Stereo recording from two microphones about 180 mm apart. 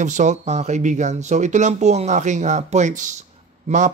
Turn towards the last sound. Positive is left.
turn(degrees=-40)  # may be behind; listen again after turning